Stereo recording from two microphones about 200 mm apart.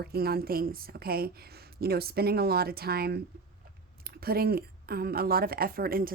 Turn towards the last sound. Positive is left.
turn(degrees=-45)  # may be behind; listen again after turning